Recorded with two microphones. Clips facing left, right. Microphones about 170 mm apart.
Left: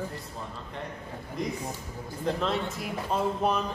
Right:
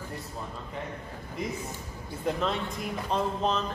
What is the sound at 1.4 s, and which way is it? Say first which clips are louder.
A man's voice: left 2 dB; centre (ahead or behind).